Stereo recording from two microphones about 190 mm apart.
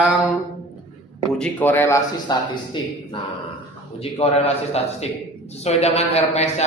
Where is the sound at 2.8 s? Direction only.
25° left (ahead or behind).